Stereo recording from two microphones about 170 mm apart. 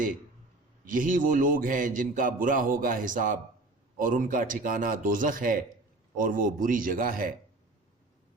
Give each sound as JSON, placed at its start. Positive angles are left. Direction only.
{"t": 0.9, "sound": "a man's voice", "side_deg": -50}